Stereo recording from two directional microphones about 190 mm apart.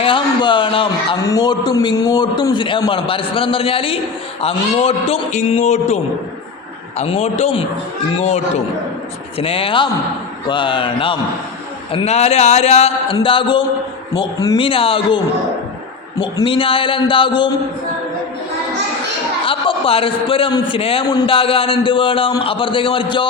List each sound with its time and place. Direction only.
0.0 s a man's voice: 25° left (ahead or behind)
7.0 s speech: 35° left (ahead or behind)
9.4 s a man's voice: 30° left (ahead or behind)
19.5 s a man's voice: 30° left (ahead or behind)